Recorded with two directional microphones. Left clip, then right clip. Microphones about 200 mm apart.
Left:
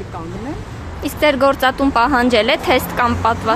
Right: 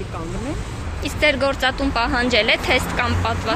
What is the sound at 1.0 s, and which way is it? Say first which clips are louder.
Speech: left 5 dB; 30° left (ahead or behind).